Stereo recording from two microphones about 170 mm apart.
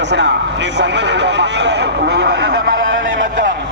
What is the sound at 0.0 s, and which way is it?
A man's voice, 90° right.